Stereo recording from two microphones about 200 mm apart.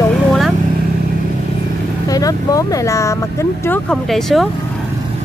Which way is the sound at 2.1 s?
20° left (ahead or behind).